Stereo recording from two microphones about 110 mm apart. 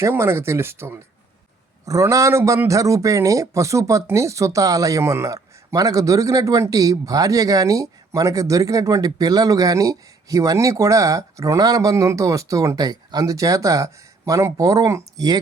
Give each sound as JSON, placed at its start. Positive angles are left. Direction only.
{"t": 0.0, "sound": "speech", "side_deg": -20}